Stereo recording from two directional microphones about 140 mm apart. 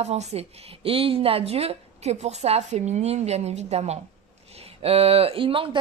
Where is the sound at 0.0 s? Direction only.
50° right (ahead or behind).